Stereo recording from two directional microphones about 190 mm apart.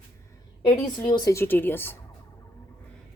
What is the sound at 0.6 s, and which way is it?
Speech, 25° left (ahead or behind).